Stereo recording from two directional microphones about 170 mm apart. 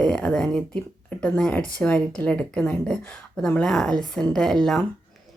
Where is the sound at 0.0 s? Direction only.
5° left (ahead or behind).